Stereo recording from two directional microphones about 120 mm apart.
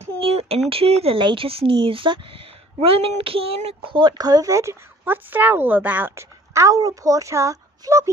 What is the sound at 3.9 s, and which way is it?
A woman's voice, 35° right (ahead or behind).